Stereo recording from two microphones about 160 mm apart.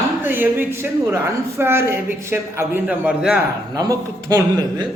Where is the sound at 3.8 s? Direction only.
20° right (ahead or behind).